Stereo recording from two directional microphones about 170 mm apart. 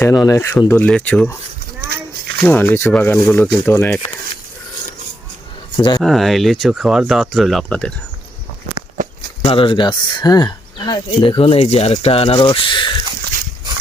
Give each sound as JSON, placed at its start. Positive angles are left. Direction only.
{"t": 0.0, "sound": "speech", "side_deg": 20}
{"t": 2.4, "sound": "speech", "side_deg": 10}
{"t": 5.7, "sound": "speech", "side_deg": 25}
{"t": 6.0, "sound": "speech", "side_deg": 0}
{"t": 9.4, "sound": "speech", "side_deg": 30}